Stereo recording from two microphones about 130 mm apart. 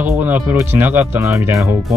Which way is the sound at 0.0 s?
15° right (ahead or behind).